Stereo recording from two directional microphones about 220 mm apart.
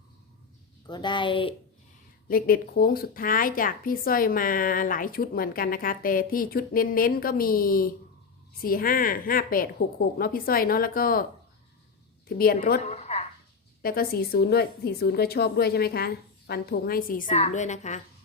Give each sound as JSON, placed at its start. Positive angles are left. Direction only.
{"t": 0.9, "sound": "a woman's voice", "side_deg": 20}
{"t": 2.2, "sound": "speech", "side_deg": 40}
{"t": 12.4, "sound": "a woman's voice", "side_deg": 45}
{"t": 12.8, "sound": "a sound", "side_deg": 30}
{"t": 13.8, "sound": "a woman's voice", "side_deg": 45}